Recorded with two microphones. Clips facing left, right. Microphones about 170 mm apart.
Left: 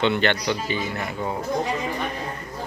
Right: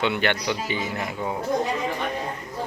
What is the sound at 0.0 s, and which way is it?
Speech, 10° right (ahead or behind).